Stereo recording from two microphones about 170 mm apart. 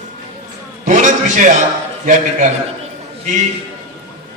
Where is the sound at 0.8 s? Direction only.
45° right (ahead or behind).